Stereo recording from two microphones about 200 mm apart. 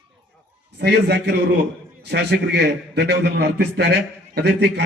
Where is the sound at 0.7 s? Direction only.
55° right (ahead or behind).